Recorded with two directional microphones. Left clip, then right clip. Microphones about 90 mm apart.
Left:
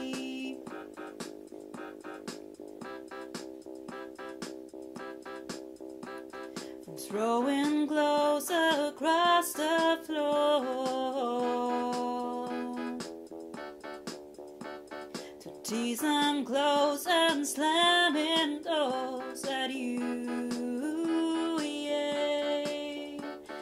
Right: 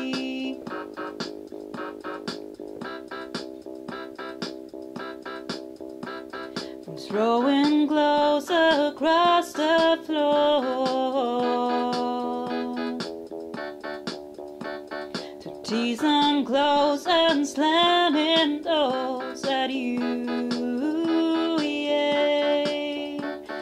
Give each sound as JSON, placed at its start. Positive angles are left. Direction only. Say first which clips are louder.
{"t": 0.0, "sound": "music", "louder": "right 8 dB", "side_deg": -30}
{"t": 7.1, "sound": "music", "louder": "right 7 dB", "side_deg": -30}
{"t": 13.6, "sound": "keyboard", "louder": "right 9 dB", "side_deg": -25}
{"t": 14.7, "sound": "music", "louder": "right 9 dB", "side_deg": -25}